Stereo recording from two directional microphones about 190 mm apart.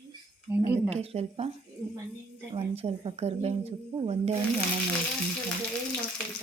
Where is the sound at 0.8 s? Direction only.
30° right (ahead or behind).